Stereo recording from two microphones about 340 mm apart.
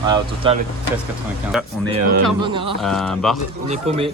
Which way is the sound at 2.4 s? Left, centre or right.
Centre.